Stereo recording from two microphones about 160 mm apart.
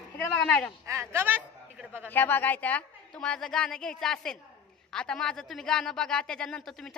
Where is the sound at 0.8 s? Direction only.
15° right (ahead or behind).